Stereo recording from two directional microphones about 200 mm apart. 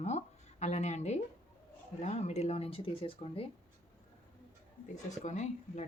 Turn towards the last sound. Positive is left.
turn(degrees=35)  # may be behind; listen again after turning